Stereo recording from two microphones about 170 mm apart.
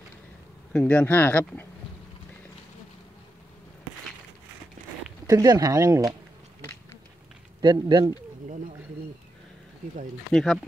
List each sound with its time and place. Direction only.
0.7 s speech: 5° left (ahead or behind)
5.2 s speech: 20° right (ahead or behind)
7.6 s speech: 25° right (ahead or behind)
8.5 s speech: 45° right (ahead or behind)
10.3 s speech: centre (ahead or behind)